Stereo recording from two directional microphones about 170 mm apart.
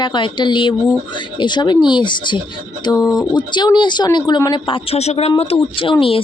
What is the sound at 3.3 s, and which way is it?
A woman's voice, 25° left (ahead or behind).